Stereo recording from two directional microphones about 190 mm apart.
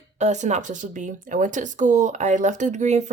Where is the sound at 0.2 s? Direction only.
35° right (ahead or behind).